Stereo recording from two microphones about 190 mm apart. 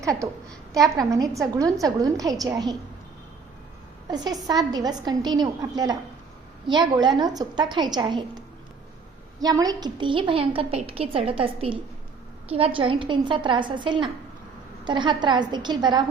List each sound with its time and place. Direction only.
0.0 s a woman's voice: 15° right (ahead or behind)
4.1 s a woman's voice: 20° right (ahead or behind)